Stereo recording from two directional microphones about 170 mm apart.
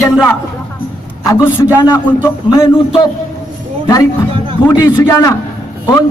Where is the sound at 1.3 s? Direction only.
15° left (ahead or behind).